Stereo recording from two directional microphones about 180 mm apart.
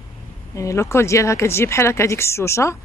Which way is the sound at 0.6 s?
15° left (ahead or behind).